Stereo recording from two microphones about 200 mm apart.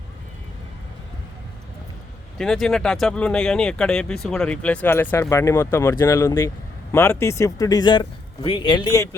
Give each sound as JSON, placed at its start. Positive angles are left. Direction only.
{"t": 2.4, "sound": "speech", "side_deg": 0}